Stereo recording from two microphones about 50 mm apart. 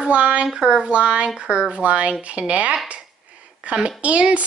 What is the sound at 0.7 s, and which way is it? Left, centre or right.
A woman's voice, centre.